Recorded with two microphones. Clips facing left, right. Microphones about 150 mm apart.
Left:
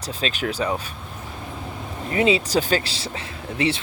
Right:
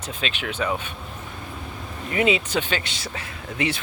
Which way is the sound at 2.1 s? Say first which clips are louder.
Left 2 dB; 30° left (ahead or behind).